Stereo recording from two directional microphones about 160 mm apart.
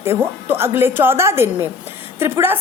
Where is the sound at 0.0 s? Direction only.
15° right (ahead or behind).